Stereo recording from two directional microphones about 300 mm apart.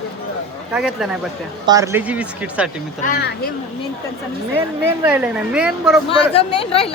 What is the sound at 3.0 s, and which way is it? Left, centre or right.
Speech, left.